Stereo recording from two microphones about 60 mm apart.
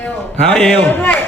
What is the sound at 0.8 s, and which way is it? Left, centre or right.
Speech, left.